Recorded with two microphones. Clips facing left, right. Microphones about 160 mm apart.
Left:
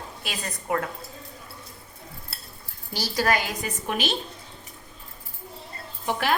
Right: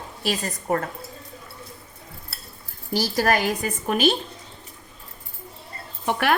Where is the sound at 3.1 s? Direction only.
50° right (ahead or behind).